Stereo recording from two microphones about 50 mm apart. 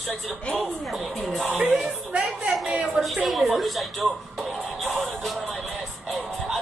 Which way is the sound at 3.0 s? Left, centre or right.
Centre.